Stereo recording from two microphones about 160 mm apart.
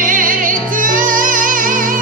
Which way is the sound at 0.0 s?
55° right (ahead or behind).